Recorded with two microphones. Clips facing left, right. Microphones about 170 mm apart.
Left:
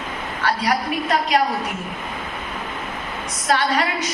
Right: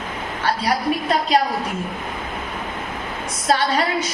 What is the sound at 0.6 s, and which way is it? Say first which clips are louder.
Speech: right 1 dB; 30° right (ahead or behind).